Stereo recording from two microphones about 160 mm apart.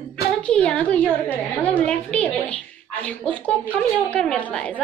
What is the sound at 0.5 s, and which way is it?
A woman's voice, 5° left (ahead or behind).